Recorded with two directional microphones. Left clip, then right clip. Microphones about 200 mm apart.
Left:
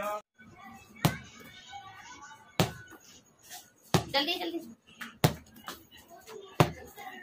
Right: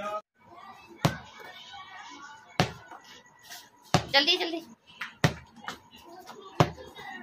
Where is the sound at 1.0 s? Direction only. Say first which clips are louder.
Right 2 dB; centre (ahead or behind).